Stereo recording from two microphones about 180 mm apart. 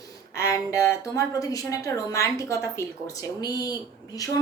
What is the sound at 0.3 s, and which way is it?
A woman's voice, 15° left (ahead or behind).